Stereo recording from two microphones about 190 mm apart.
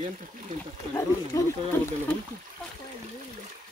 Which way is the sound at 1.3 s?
15° left (ahead or behind).